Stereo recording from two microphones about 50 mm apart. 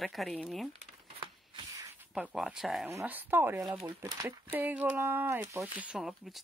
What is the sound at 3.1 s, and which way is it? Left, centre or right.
Speech, right.